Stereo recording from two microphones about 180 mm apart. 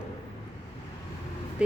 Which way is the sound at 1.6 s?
5° right (ahead or behind).